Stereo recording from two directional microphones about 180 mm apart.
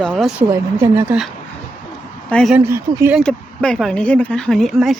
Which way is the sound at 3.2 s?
5° left (ahead or behind).